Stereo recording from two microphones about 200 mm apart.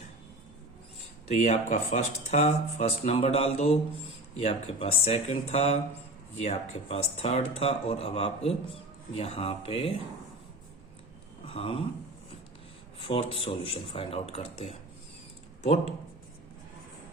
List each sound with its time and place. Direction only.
1.3 s speech: 35° left (ahead or behind)
11.4 s a sound: 30° left (ahead or behind)
13.0 s speech: 25° left (ahead or behind)